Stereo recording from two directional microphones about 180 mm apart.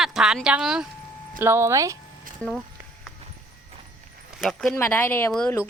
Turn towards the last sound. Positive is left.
turn(degrees=10)  # may be behind; listen again after turning